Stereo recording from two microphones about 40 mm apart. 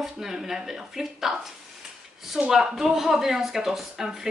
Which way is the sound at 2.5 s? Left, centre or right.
Centre.